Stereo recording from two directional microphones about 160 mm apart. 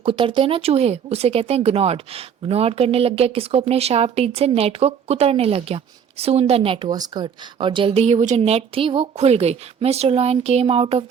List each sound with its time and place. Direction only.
0.0 s speech: 30° right (ahead or behind)
6.9 s speech: 25° right (ahead or behind)